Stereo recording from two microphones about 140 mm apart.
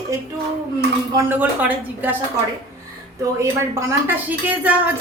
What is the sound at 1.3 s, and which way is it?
Speech, 10° right (ahead or behind).